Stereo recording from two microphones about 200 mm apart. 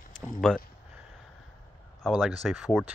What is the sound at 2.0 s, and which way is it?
Speech, centre (ahead or behind).